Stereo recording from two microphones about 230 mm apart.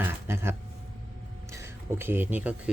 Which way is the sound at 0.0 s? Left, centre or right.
Centre.